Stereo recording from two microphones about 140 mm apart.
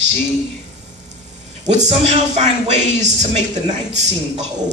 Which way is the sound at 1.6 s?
50° right (ahead or behind).